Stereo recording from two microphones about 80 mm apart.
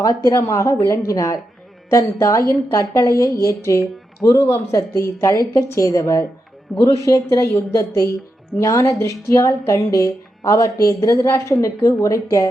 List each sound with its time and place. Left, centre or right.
0.3 s a woman's voice: left